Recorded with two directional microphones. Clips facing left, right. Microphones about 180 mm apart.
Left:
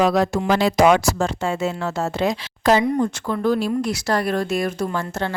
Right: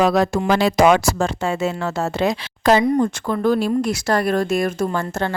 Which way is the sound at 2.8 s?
50° right (ahead or behind).